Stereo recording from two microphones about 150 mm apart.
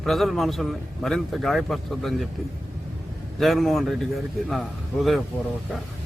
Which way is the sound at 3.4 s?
Centre (ahead or behind).